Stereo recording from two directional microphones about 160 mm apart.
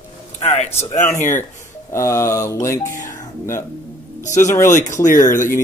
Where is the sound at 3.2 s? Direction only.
15° left (ahead or behind).